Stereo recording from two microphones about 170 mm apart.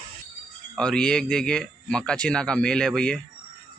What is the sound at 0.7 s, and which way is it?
Speech, 5° left (ahead or behind).